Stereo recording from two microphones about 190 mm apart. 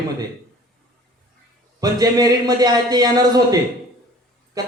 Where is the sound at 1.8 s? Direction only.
20° right (ahead or behind).